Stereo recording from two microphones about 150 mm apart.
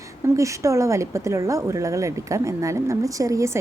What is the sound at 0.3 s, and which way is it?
Speech, 20° right (ahead or behind).